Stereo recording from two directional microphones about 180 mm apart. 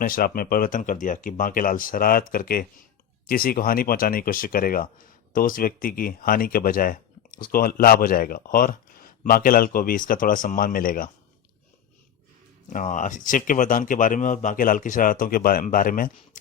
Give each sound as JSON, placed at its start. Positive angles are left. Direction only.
{"t": 0.0, "sound": "speech", "side_deg": 50}
{"t": 12.7, "sound": "speech", "side_deg": 45}